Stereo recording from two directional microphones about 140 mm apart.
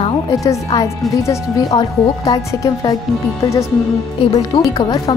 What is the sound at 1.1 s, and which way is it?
A woman's voice, 20° left (ahead or behind).